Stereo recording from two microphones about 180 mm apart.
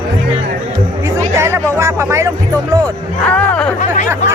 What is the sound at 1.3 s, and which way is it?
Music, 15° right (ahead or behind).